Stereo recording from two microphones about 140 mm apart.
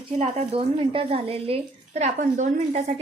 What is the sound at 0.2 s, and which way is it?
A woman's voice, 50° right (ahead or behind).